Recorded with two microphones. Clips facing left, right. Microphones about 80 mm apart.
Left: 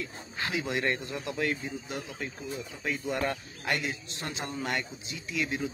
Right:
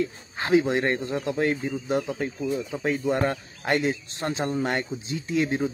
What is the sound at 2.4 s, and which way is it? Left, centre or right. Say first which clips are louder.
Speech: right 10 dB; right.